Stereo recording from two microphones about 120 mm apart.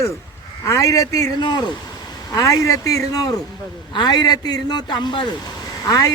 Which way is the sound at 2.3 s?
30° left (ahead or behind).